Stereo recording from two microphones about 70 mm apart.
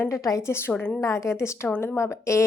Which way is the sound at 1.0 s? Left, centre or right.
Left.